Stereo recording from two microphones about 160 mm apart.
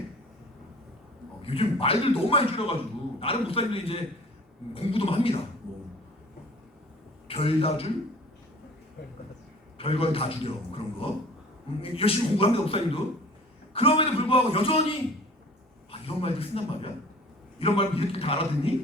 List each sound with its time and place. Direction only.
1.5 s a man's voice: 35° left (ahead or behind)
7.3 s a man's voice: 35° left (ahead or behind)
9.7 s a man's voice: 35° left (ahead or behind)